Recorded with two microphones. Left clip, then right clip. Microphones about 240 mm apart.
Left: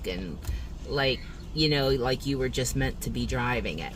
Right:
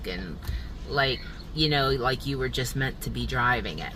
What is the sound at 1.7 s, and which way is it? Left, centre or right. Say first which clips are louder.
Speech: right 2 dB; centre.